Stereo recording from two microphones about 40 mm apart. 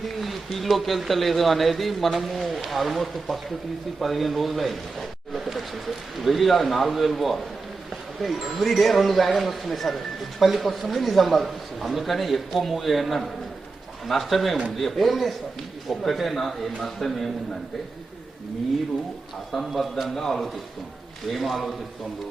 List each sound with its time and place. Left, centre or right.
0.0 s a man's voice: centre
19.5 s a man's voice: centre